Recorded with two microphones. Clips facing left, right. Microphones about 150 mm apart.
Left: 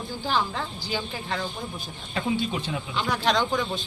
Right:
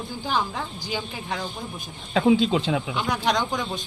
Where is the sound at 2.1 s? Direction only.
90° right.